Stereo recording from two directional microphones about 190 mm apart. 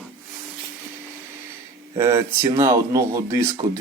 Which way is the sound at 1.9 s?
15° right (ahead or behind).